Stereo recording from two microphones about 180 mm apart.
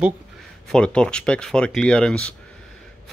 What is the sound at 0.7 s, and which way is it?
Speech, 5° left (ahead or behind).